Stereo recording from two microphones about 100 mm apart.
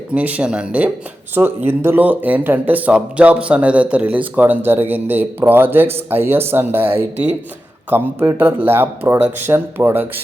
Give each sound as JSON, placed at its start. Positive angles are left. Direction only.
{"t": 0.1, "sound": "speech", "side_deg": -15}